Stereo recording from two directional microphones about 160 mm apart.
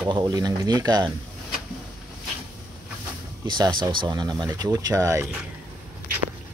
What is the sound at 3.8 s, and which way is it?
Speech, 25° right (ahead or behind).